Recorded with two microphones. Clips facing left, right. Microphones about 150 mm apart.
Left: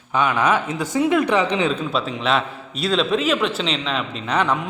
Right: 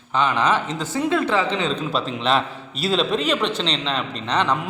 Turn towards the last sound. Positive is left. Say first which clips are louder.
# left 1 dB
turn(degrees=5)  # may be behind; listen again after turning